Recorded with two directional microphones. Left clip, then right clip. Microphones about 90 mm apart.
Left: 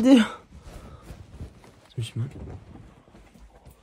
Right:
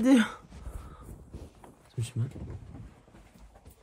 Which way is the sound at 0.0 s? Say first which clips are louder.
Left 6 dB; 80° left.